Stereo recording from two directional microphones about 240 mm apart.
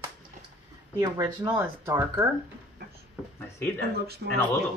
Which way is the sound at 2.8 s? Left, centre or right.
Right.